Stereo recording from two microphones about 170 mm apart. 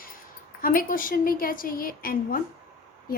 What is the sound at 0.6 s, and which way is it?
A woman's voice, 55° left (ahead or behind).